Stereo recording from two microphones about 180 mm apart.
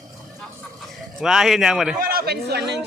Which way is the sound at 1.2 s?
Centre (ahead or behind).